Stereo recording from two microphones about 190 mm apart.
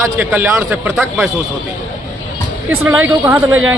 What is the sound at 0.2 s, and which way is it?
Speech, 10° right (ahead or behind).